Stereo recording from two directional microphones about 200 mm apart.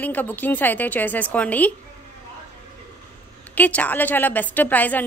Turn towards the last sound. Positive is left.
turn(degrees=10)  # may be behind; listen again after turning